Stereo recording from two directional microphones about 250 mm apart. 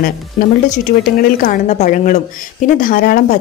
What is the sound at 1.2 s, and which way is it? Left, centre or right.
Speech, left.